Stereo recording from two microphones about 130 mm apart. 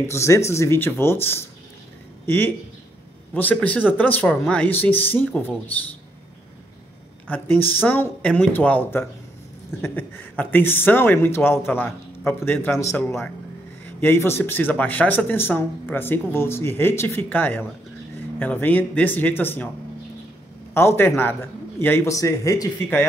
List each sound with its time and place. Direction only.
0.0 s a man's voice: 20° left (ahead or behind)
7.2 s speech: 15° left (ahead or behind)
20.7 s a man's voice: 20° left (ahead or behind)